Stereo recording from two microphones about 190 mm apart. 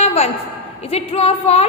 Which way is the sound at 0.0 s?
35° left (ahead or behind).